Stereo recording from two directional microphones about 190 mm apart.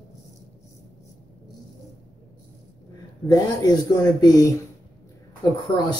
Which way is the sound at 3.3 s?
20° left (ahead or behind).